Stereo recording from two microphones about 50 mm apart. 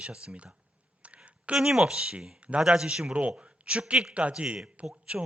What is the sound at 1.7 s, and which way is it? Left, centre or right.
A man's voice, centre.